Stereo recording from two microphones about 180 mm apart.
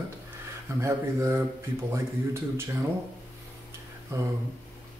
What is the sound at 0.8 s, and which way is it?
Speech, 15° right (ahead or behind).